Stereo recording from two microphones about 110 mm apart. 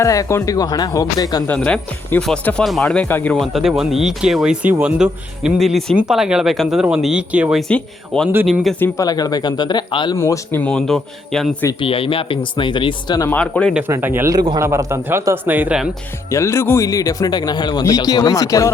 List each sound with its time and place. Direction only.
0.0 s speech: 30° left (ahead or behind)
1.5 s speech: 10° left (ahead or behind)
3.3 s speech: centre (ahead or behind)
7.7 s speech: 10° left (ahead or behind)
9.0 s speech: 35° left (ahead or behind)
10.2 s speech: 25° left (ahead or behind)
10.6 s speech: 5° left (ahead or behind)
11.8 s speech: 55° left (ahead or behind)
13.3 s speech: 10° left (ahead or behind)
13.8 s speech: 20° right (ahead or behind)
16.3 s speech: 25° left (ahead or behind)